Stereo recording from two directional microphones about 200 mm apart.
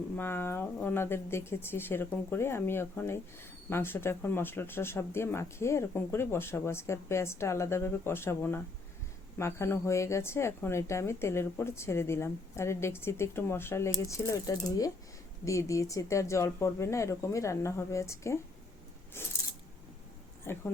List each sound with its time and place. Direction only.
0.2 s speech: 10° left (ahead or behind)
20.4 s speech: 10° left (ahead or behind)